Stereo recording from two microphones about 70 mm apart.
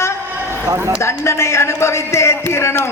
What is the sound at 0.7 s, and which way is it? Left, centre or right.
Speech, right.